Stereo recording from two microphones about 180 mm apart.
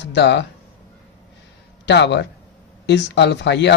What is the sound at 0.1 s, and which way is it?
Speech, 70° left (ahead or behind).